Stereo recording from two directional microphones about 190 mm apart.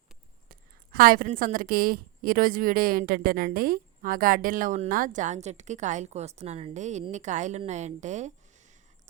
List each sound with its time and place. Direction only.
0.9 s a woman's voice: 50° right (ahead or behind)